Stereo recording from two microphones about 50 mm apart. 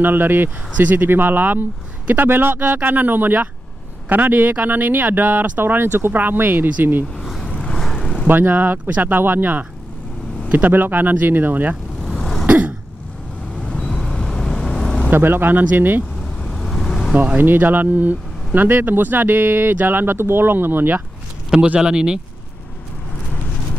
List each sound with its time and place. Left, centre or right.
0.0 s speech: right
7.2 s vehicle: centre
7.4 s vehicle: centre
7.7 s vehicle: centre
8.0 s vehicle: centre
8.3 s speech: right
12.0 s vehicle: centre
12.4 s throat clearing: right
13.8 s vehicle: centre
15.0 s speech: right
16.2 s vehicle: centre
17.1 s speech: right
17.4 s speech: right
21.5 s speech: centre